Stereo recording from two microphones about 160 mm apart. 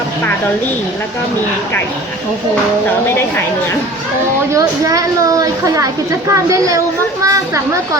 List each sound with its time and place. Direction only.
4.5 s speech: 20° right (ahead or behind)